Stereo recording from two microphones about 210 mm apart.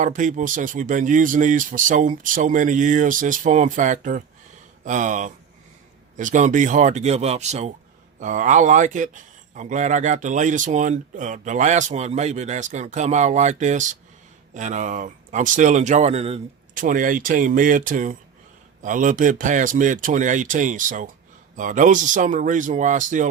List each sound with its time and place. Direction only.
0.0 s a man's voice: 40° right (ahead or behind)